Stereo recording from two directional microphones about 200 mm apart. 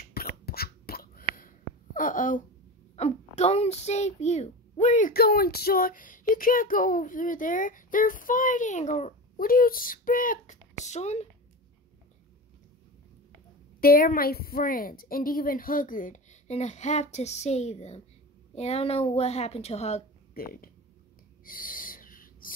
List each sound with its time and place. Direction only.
0.0 s a sound: 50° left (ahead or behind)
2.0 s a child's voice: 40° left (ahead or behind)
13.7 s a woman's voice: 50° left (ahead or behind); by 20.0 s 30° left (ahead or behind)
20.3 s speech: 50° left (ahead or behind)
21.5 s owl: 45° left (ahead or behind)